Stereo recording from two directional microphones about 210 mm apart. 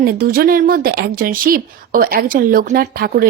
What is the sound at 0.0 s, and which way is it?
A woman's voice, 45° right (ahead or behind).